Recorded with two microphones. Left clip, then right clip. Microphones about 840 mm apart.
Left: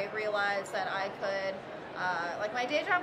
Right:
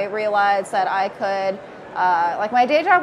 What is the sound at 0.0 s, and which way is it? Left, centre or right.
A woman's voice, right.